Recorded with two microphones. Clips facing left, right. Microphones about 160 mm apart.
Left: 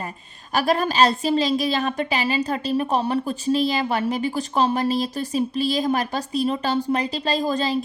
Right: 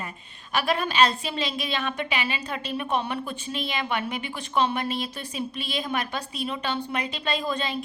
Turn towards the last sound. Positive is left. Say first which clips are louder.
# left 6 dB
turn(degrees=35)  # may be behind; listen again after turning